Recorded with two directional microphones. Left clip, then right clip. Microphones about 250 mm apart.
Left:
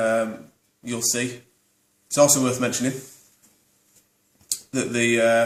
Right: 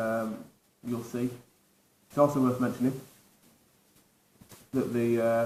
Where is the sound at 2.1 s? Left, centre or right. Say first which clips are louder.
Left 7 dB; left.